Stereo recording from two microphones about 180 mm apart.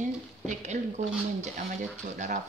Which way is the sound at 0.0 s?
40° right (ahead or behind).